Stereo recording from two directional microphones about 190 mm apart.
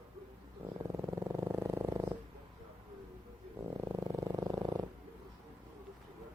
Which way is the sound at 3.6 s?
15° right (ahead or behind).